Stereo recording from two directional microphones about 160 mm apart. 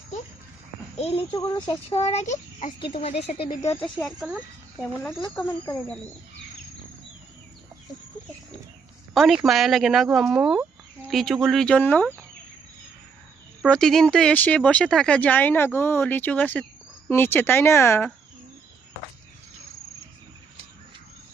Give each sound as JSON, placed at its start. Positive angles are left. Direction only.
{"t": 0.9, "sound": "speech", "side_deg": 35}
{"t": 1.4, "sound": "speech", "side_deg": 20}
{"t": 2.6, "sound": "speech", "side_deg": 30}
{"t": 4.2, "sound": "speech", "side_deg": -5}
{"t": 5.3, "sound": "speech", "side_deg": 10}
{"t": 9.1, "sound": "speech", "side_deg": 0}
{"t": 13.6, "sound": "speech", "side_deg": 5}